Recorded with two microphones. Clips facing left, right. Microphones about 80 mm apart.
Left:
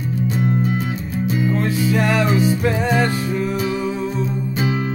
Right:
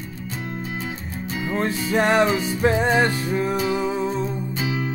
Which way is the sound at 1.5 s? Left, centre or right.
Right.